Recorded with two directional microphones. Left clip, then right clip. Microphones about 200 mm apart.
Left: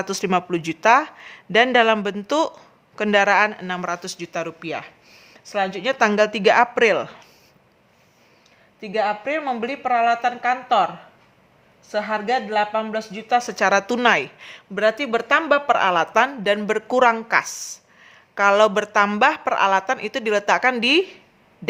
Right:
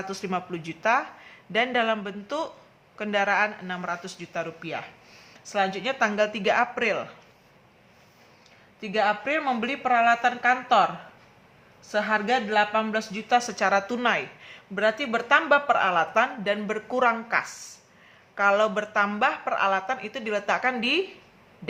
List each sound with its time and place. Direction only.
0.0 s speech: 50° left (ahead or behind)
8.8 s a woman's voice: 30° left (ahead or behind)
11.9 s speech: 30° left (ahead or behind); by 21.0 s 50° left (ahead or behind)